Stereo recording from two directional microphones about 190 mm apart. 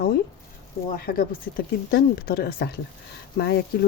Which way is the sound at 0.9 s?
50° left (ahead or behind).